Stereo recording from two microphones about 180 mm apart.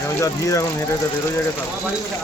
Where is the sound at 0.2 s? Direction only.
15° left (ahead or behind).